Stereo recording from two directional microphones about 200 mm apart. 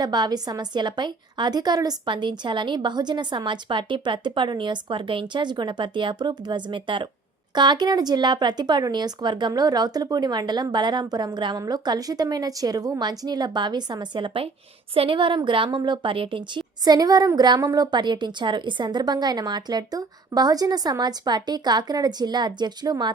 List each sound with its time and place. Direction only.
0.0 s a woman's voice: 20° right (ahead or behind)